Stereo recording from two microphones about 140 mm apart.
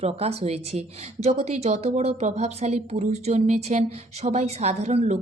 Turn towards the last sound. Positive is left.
turn(degrees=-50)  # may be behind; listen again after turning